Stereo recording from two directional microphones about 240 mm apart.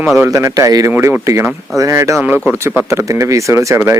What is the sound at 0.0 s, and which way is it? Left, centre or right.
Speech, centre.